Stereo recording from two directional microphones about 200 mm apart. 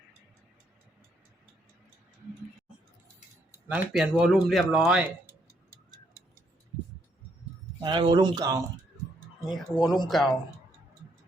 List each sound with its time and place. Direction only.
3.7 s speech: 5° right (ahead or behind)
7.8 s speech: 25° right (ahead or behind)
9.5 s speech: 20° left (ahead or behind)
10.1 s speech: centre (ahead or behind)